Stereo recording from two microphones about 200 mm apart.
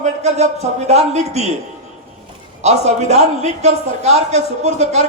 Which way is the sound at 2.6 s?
35° right (ahead or behind).